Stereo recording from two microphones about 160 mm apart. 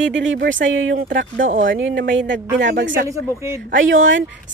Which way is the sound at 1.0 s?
60° right (ahead or behind).